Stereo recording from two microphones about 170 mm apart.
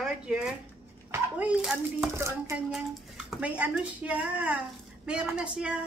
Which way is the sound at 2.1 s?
15° right (ahead or behind).